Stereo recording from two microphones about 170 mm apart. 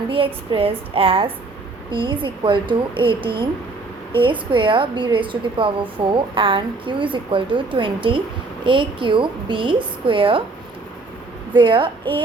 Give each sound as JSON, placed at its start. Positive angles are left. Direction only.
{"t": 0.1, "sound": "a woman's voice", "side_deg": -30}
{"t": 11.5, "sound": "a woman's voice", "side_deg": -30}